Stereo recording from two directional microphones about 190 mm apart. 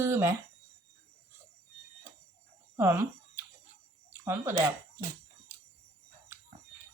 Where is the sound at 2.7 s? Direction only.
15° right (ahead or behind).